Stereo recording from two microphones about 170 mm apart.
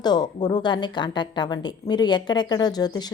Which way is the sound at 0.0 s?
25° left (ahead or behind).